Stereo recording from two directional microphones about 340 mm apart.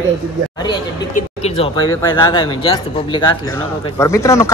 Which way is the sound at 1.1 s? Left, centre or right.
Centre.